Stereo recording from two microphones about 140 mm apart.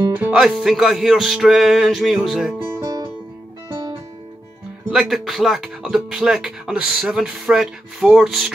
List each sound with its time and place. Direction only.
0.1 s speech: 10° right (ahead or behind)
2.6 s music: 20° right (ahead or behind)
4.9 s speech: centre (ahead or behind)